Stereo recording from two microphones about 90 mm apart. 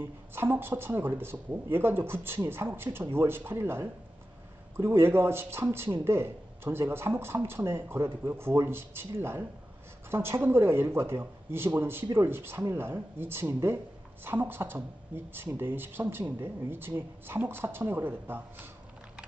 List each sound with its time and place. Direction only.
0.3 s speech: 25° right (ahead or behind)